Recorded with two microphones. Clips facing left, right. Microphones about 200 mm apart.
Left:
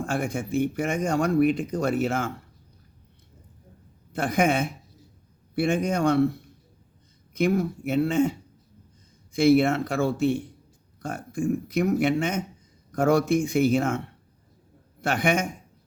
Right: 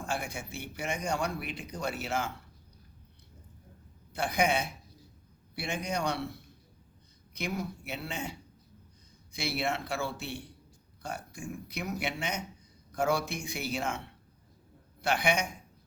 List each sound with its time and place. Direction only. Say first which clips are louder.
0.0 s speech: left 9 dB; 55° left (ahead or behind)
4.1 s speech: left 6 dB; 50° left (ahead or behind)
7.3 s speech: left 12 dB; 50° left (ahead or behind)
9.3 s speech: left 14 dB; 50° left (ahead or behind)